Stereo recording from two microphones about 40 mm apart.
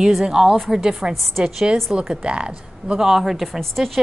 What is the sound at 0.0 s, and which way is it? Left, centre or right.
A woman's voice, centre.